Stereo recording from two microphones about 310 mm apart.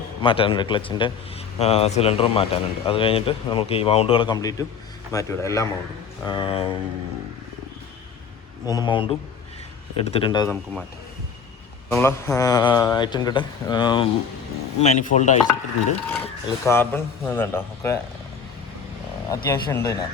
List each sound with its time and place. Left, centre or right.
0.2 s speech: centre
8.6 s speech: centre
11.9 s speech: centre
14.8 s stir: left
16.6 s speech: centre
19.3 s speech: centre